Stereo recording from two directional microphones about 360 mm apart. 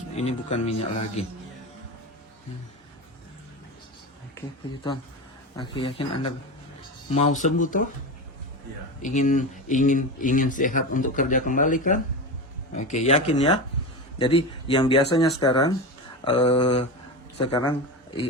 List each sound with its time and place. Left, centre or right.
0.2 s speech: centre
5.5 s speech: centre
7.1 s speech: centre
9.0 s speech: left